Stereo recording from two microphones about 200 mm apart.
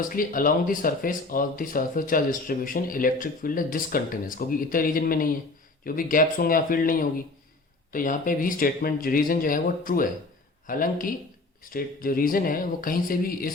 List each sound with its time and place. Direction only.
0.0 s speech: 45° left (ahead or behind)